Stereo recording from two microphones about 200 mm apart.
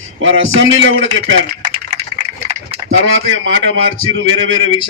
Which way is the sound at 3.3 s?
75° right (ahead or behind).